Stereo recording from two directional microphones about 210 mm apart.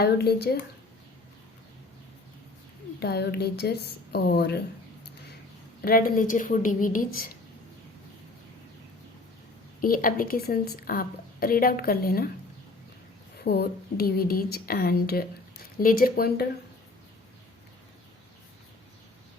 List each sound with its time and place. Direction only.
0.0 s speech: 50° left (ahead or behind)
3.0 s speech: 50° left (ahead or behind)
5.8 s a woman's voice: 45° left (ahead or behind)
9.8 s speech: 40° left (ahead or behind)
13.4 s speech: 50° left (ahead or behind)